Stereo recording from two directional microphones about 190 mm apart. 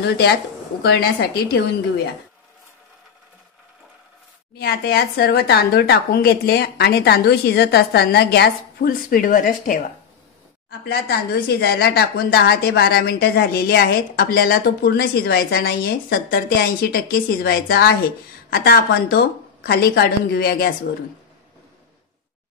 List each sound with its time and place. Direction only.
0.0 s a woman's voice: 60° left (ahead or behind)
4.6 s a woman's voice: 55° left (ahead or behind)
10.9 s a woman's voice: 55° left (ahead or behind)